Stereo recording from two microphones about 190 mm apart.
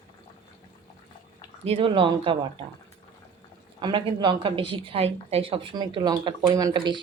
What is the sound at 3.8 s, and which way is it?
A woman's voice, 25° right (ahead or behind).